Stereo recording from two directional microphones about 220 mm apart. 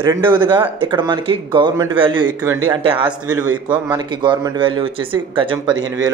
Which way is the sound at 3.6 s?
5° right (ahead or behind).